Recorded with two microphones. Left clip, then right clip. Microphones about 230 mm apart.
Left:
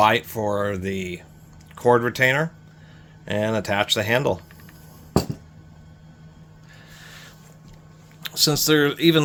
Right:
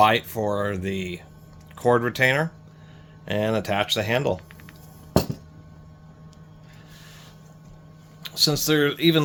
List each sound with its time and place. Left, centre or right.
0.0 s speech: centre
8.2 s speech: left